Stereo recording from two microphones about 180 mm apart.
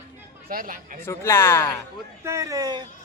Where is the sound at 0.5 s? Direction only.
50° right (ahead or behind).